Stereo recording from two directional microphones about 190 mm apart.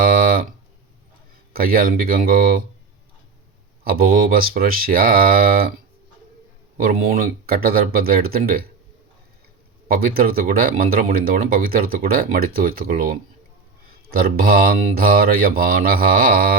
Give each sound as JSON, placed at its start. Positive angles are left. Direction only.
{"t": 0.0, "sound": "music", "side_deg": -50}
{"t": 1.5, "sound": "speech", "side_deg": -50}
{"t": 3.8, "sound": "speech", "side_deg": -50}
{"t": 6.7, "sound": "speech", "side_deg": -50}
{"t": 9.9, "sound": "speech", "side_deg": -50}